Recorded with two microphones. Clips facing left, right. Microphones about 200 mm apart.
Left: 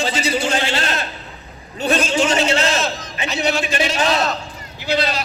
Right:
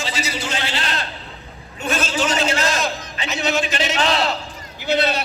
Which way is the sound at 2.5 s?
30° left (ahead or behind).